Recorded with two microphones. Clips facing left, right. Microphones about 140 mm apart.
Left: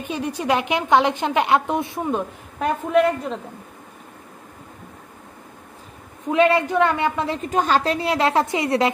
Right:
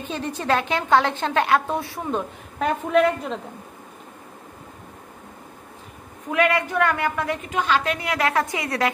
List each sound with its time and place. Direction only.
0.0 s a woman's voice: 10° left (ahead or behind)
2.0 s a woman's voice: 5° left (ahead or behind)
6.3 s a woman's voice: 25° left (ahead or behind)
7.4 s a woman's voice: 40° left (ahead or behind); by 8.9 s 25° left (ahead or behind)